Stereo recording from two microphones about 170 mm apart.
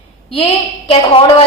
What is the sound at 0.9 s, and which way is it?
Speech, 30° left (ahead or behind).